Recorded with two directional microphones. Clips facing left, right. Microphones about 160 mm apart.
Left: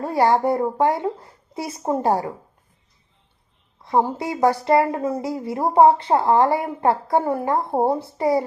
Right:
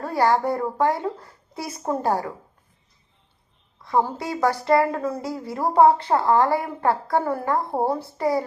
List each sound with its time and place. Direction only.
0.0 s a woman's voice: 25° left (ahead or behind)
3.8 s a woman's voice: 20° left (ahead or behind)